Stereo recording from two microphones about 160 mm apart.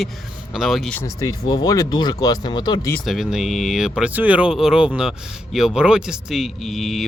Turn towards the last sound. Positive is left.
turn(degrees=0)  # may be behind; listen again after turning